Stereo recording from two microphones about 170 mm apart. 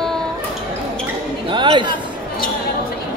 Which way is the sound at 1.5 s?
25° right (ahead or behind).